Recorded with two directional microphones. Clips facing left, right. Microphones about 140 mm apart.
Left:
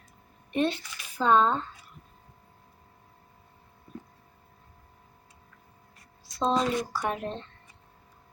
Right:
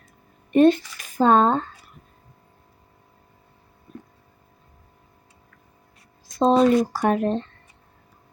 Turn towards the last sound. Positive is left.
turn(degrees=-50)  # may be behind; listen again after turning